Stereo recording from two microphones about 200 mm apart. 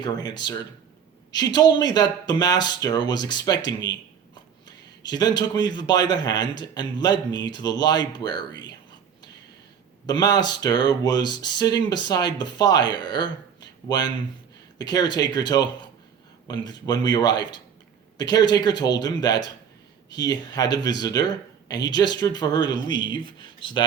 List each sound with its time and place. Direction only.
0.0 s speech: 20° left (ahead or behind)
5.0 s speech: 20° left (ahead or behind)
10.1 s speech: 20° left (ahead or behind)